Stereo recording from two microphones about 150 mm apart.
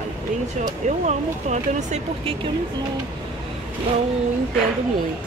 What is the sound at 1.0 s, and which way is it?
Speech, 50° right (ahead or behind).